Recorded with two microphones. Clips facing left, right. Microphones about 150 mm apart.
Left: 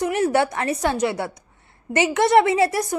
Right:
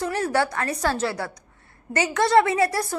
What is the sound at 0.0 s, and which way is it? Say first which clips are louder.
A woman's voice: left 4 dB; 20° left (ahead or behind).